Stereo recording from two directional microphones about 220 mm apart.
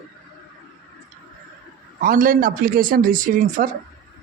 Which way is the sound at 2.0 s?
40° right (ahead or behind).